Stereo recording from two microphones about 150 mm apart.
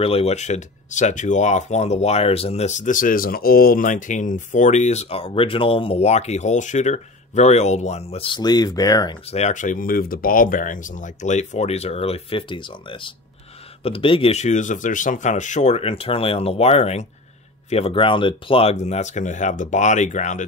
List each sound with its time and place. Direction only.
0.0 s speech: 40° left (ahead or behind); by 9.1 s 25° left (ahead or behind)
9.3 s speech: 50° left (ahead or behind)